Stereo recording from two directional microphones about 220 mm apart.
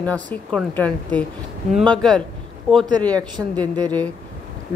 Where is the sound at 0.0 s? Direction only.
5° left (ahead or behind).